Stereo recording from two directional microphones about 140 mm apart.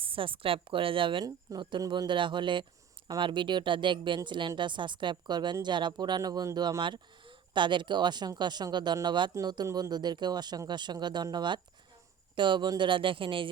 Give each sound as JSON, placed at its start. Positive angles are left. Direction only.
{"t": 0.0, "sound": "speech", "side_deg": -40}